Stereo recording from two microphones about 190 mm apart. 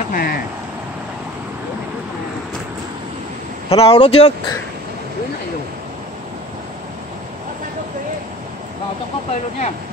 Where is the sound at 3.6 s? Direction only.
30° left (ahead or behind).